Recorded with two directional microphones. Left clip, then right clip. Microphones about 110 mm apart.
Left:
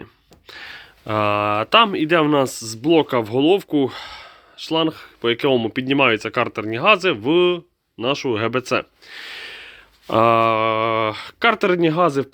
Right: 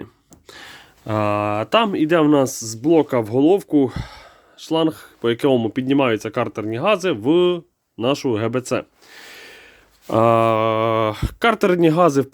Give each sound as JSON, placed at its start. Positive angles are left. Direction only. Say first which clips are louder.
{"t": 0.0, "sound": "speech", "louder": "right 2 dB", "side_deg": -40}
{"t": 7.9, "sound": "speech", "louder": "right 1 dB", "side_deg": -55}
{"t": 8.3, "sound": "speech", "louder": "left 1 dB", "side_deg": -30}